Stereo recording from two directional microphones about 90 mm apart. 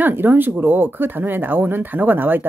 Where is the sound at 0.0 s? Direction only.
20° right (ahead or behind).